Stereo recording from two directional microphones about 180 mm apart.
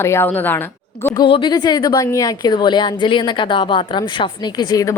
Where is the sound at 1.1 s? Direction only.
25° left (ahead or behind).